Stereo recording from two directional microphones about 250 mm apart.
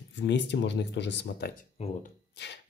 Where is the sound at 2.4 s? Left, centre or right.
Left.